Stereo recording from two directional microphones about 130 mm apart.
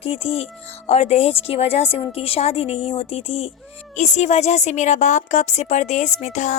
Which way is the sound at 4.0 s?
60° left (ahead or behind).